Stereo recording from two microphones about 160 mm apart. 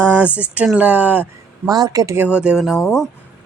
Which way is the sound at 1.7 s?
25° right (ahead or behind).